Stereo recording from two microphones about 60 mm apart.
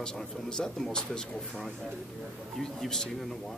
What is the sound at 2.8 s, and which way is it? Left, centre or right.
Speech, centre.